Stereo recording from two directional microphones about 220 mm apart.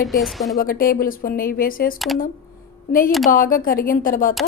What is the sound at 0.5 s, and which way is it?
Speech, 40° left (ahead or behind).